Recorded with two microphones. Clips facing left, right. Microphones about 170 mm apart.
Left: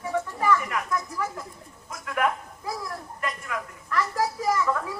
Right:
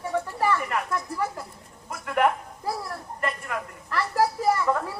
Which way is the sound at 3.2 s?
50° right (ahead or behind).